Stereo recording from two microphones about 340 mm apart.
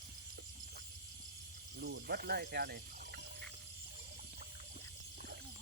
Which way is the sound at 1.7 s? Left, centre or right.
Right.